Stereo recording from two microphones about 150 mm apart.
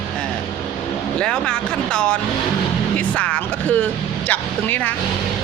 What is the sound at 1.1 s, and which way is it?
Speech, 5° left (ahead or behind).